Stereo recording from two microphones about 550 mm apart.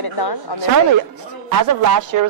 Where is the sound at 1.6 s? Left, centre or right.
Right.